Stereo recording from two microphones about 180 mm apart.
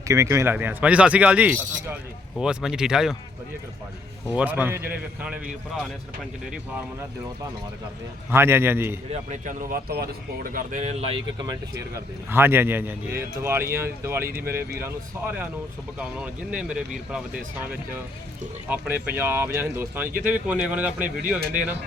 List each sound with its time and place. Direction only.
0.1 s speech: 15° right (ahead or behind)
4.3 s speech: 5° right (ahead or behind)
8.3 s speech: 15° right (ahead or behind)
9.3 s speech: 45° right (ahead or behind)
11.9 s speech: 10° right (ahead or behind)